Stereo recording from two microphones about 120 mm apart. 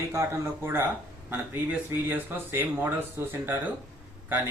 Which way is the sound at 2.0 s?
15° right (ahead or behind).